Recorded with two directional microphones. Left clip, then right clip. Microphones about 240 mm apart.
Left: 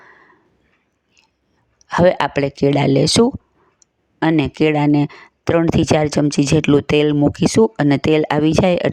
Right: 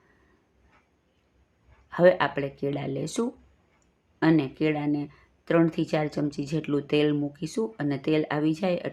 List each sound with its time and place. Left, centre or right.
1.9 s speech: left